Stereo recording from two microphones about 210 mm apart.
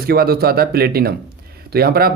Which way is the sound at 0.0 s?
45° right (ahead or behind).